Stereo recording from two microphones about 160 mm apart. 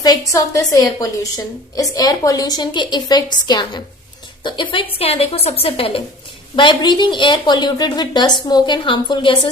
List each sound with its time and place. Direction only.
0.0 s a woman's voice: 20° left (ahead or behind)